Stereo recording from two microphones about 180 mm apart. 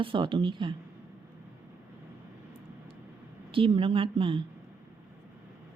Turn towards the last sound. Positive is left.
turn(degrees=-30)  # may be behind; listen again after turning